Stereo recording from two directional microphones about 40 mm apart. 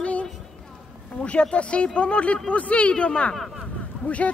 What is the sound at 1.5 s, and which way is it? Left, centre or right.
Speech, left.